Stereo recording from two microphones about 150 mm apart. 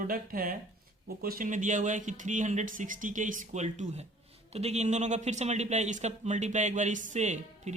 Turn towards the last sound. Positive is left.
turn(degrees=-50)  # may be behind; listen again after turning